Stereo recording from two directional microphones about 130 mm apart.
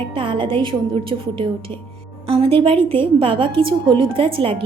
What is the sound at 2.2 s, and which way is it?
A woman's voice, 45° right (ahead or behind).